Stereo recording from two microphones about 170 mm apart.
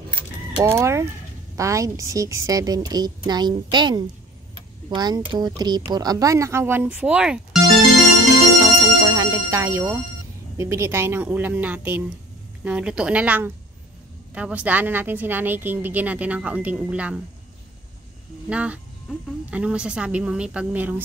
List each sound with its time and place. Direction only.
0.7 s a woman's voice: 15° right (ahead or behind)
8.5 s a woman's voice: 25° right (ahead or behind); by 17.2 s 5° right (ahead or behind)
18.5 s a woman's voice: 5° right (ahead or behind)